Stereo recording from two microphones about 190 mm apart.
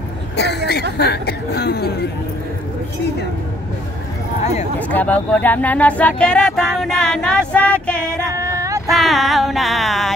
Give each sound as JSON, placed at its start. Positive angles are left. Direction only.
{"t": 0.9, "sound": "speech", "side_deg": 60}
{"t": 4.7, "sound": "speech", "side_deg": 10}
{"t": 8.1, "sound": "female singing", "side_deg": -15}
{"t": 8.8, "sound": "a sound", "side_deg": 0}